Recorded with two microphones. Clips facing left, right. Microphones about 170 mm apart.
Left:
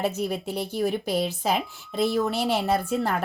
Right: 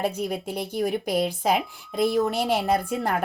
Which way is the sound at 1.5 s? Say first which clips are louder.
Right 2 dB; 10° right (ahead or behind).